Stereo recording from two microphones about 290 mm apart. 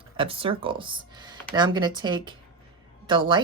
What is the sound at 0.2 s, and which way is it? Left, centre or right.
Speech, centre.